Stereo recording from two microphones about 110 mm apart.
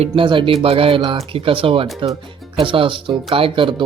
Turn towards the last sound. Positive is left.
turn(degrees=-50)  # may be behind; listen again after turning